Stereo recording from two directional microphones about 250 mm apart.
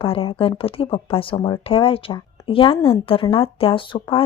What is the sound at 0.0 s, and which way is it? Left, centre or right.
Speech, left.